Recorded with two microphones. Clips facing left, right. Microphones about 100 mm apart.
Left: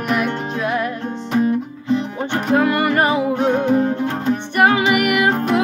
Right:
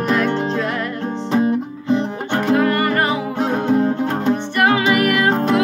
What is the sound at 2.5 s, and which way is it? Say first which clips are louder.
Music: left 1 dB; 15° left (ahead or behind).